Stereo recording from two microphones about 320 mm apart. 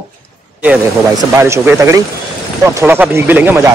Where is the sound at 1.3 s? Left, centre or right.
Centre.